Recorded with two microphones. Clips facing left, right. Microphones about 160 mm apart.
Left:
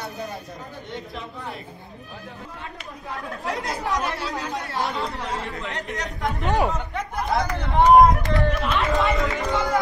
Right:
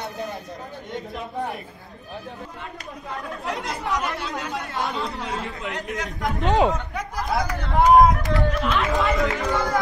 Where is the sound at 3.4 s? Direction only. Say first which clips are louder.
Left 1 dB; centre (ahead or behind).